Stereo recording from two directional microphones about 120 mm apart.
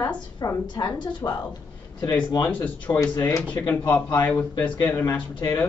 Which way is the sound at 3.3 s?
15° left (ahead or behind).